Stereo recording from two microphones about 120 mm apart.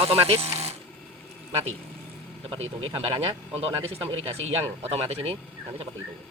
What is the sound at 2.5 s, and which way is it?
Speech, 55° right (ahead or behind).